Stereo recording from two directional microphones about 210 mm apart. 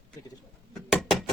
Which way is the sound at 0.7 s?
Centre (ahead or behind).